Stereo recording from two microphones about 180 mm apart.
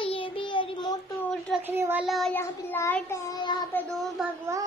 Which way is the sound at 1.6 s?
10° right (ahead or behind).